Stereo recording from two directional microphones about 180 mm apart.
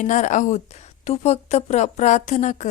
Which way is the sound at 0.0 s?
45° left (ahead or behind).